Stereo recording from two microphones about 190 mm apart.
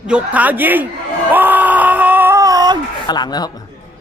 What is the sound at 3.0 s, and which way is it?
Speech, 20° left (ahead or behind).